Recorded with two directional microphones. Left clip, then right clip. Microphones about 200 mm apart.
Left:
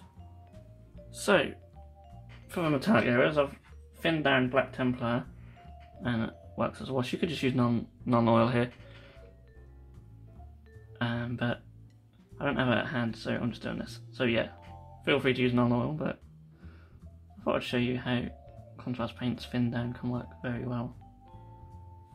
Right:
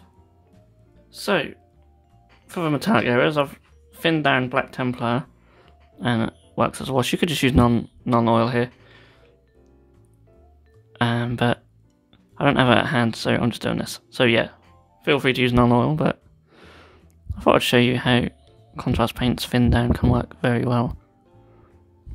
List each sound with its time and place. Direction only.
1.1 s speech: 25° right (ahead or behind)
2.4 s speech: 35° right (ahead or behind)
10.9 s speech: 45° right (ahead or behind)
17.4 s speech: 50° right (ahead or behind)